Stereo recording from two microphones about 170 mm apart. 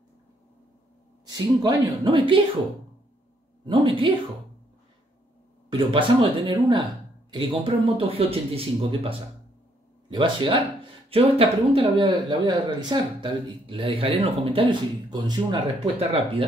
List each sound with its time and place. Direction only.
1.2 s a woman's voice: 20° right (ahead or behind)
3.6 s a man's voice: 30° right (ahead or behind)
5.7 s a woman's voice: 30° right (ahead or behind)